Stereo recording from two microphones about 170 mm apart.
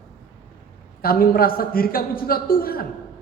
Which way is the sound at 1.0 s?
60° left (ahead or behind).